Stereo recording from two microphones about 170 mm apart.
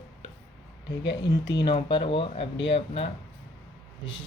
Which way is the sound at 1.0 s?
90° left.